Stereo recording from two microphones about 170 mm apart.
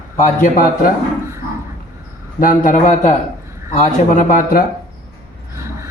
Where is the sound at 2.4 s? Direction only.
55° left (ahead or behind).